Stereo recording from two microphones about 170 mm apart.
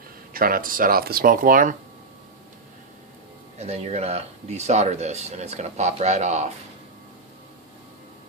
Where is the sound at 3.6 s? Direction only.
40° right (ahead or behind).